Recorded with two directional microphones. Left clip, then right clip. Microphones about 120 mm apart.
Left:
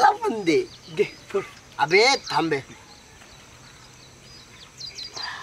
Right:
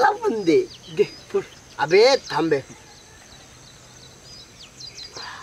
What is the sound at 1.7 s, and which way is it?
Speech, 10° left (ahead or behind).